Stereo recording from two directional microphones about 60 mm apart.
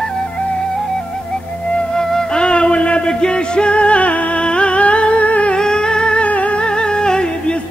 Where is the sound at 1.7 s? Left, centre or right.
Centre.